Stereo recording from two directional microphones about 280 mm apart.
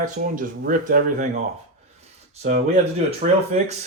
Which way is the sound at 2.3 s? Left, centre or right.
Right.